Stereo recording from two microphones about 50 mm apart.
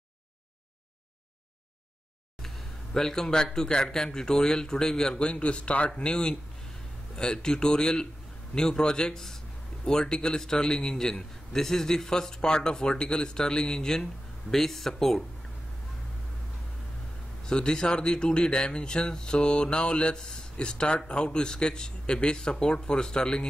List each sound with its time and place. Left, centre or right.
2.4 s a sound: centre
3.5 s a man's voice: centre
17.5 s a man's voice: centre